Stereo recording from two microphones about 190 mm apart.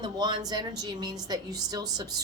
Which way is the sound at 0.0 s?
20° right (ahead or behind).